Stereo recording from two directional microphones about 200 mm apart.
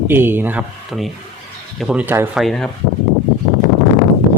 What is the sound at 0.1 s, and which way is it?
Speech, 10° right (ahead or behind).